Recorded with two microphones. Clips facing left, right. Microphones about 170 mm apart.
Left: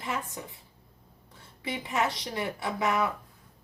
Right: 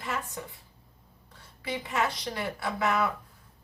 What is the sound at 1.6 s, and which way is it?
A woman's voice, 20° left (ahead or behind).